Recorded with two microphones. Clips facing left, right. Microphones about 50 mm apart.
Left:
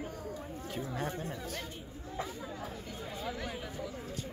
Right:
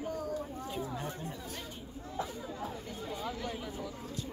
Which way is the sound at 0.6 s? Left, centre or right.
Left.